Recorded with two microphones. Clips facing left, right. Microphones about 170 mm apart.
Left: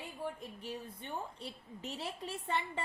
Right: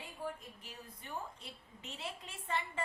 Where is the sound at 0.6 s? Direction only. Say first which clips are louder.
Left 9 dB; 30° left (ahead or behind).